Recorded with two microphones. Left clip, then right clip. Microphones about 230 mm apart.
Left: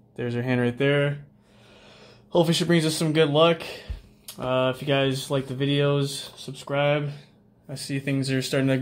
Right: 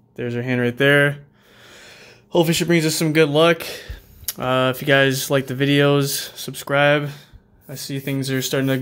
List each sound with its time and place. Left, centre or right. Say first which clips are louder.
0.2 s speech: right 4 dB; centre; by 7.1 s right
7.6 s speech: right 2 dB; centre